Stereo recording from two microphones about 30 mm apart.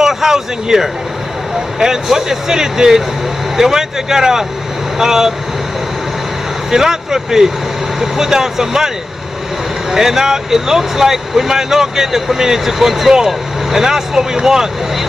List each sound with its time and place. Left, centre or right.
0.0 s speech: centre
6.7 s speech: centre